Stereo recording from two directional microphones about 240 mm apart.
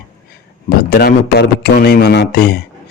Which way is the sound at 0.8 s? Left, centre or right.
Left.